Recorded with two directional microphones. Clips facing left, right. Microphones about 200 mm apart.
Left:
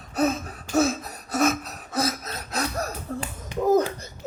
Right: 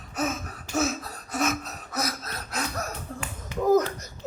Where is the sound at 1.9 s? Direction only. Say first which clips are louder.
Left 5 dB; 30° left (ahead or behind).